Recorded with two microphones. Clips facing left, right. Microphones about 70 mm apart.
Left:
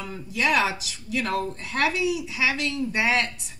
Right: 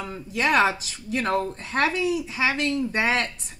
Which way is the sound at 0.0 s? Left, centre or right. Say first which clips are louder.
Right 1 dB; right.